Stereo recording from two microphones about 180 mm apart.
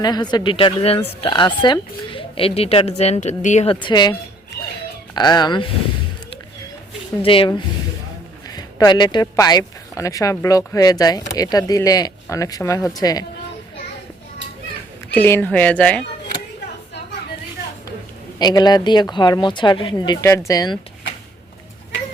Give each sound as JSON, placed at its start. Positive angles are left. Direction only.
{"t": 0.0, "sound": "speech", "side_deg": 25}
{"t": 5.1, "sound": "speech", "side_deg": 25}
{"t": 7.2, "sound": "a woman's voice", "side_deg": 30}
{"t": 15.1, "sound": "speech", "side_deg": 10}
{"t": 18.3, "sound": "speech", "side_deg": 25}